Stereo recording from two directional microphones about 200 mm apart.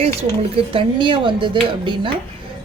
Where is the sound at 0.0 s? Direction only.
30° right (ahead or behind).